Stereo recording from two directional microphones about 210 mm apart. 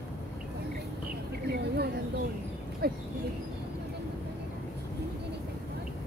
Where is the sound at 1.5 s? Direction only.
50° right (ahead or behind).